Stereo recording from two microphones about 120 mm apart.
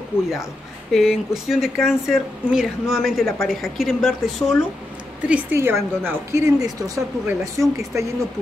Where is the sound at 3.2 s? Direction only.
20° left (ahead or behind).